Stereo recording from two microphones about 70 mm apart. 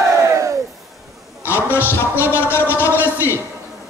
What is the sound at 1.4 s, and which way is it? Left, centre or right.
Speech, left.